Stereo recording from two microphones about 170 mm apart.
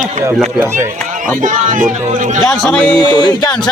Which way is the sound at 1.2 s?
50° right (ahead or behind).